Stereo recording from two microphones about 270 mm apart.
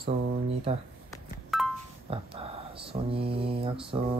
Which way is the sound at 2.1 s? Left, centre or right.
Right.